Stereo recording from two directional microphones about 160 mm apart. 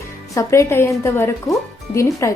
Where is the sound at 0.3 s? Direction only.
15° left (ahead or behind).